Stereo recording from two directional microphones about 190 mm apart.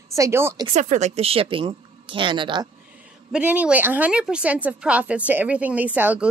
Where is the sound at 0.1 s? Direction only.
15° right (ahead or behind).